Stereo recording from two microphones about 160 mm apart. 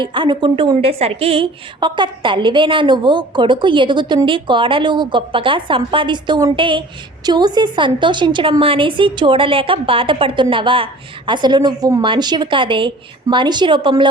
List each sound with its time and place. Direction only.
0.0 s a woman's voice: 30° right (ahead or behind)